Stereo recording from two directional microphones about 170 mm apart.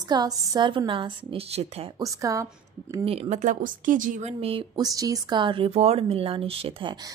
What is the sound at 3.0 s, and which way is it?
Speech, 35° right (ahead or behind).